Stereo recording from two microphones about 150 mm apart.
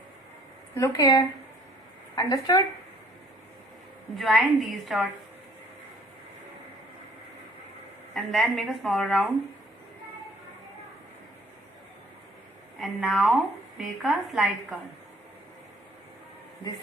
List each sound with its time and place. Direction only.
0.8 s speech: 25° left (ahead or behind)
4.2 s speech: centre (ahead or behind)
8.1 s speech: centre (ahead or behind)
12.8 s speech: centre (ahead or behind)